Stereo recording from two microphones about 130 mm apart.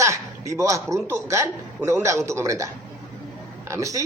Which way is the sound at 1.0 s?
20° right (ahead or behind).